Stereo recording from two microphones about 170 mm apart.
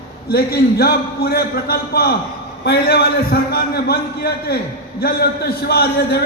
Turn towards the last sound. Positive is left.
turn(degrees=70)  # may be behind; listen again after turning